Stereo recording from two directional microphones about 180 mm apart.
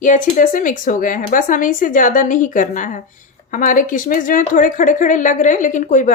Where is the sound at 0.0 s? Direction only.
50° left (ahead or behind).